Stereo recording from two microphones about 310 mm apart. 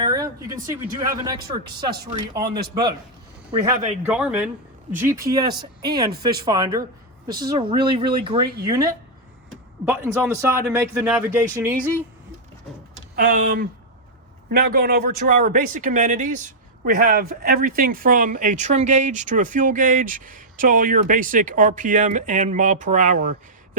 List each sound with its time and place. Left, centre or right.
0.0 s a man's voice: centre
4.0 s a man's voice: centre
13.1 s a man's voice: right